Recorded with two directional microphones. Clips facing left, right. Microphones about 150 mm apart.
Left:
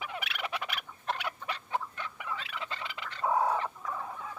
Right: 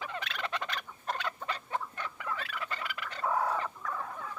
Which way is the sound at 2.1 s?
20° left (ahead or behind).